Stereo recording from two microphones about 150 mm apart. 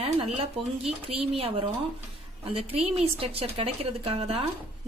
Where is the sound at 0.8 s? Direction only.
40° right (ahead or behind).